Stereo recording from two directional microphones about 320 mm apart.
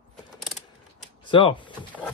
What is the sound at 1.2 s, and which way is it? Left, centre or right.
Speech, centre.